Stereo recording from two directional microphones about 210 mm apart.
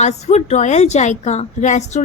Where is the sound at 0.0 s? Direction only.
35° left (ahead or behind).